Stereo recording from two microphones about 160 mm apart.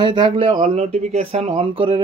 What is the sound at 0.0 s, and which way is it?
Speech, 30° right (ahead or behind).